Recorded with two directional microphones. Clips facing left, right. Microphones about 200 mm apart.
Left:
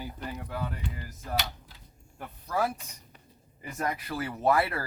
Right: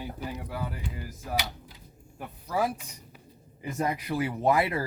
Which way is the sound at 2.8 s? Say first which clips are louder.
Right 4 dB; 10° right (ahead or behind).